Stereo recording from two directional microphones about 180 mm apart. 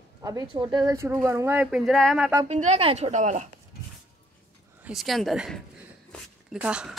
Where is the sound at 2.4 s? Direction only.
40° right (ahead or behind).